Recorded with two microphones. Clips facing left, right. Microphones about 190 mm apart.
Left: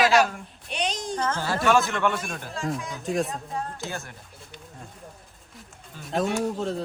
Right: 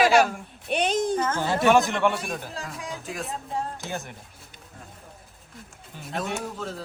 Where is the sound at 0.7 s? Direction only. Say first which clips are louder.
Right 5 dB; 55° right (ahead or behind).